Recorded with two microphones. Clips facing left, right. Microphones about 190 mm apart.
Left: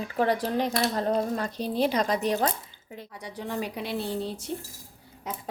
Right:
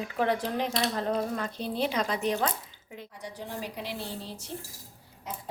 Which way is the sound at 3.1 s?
70° left (ahead or behind).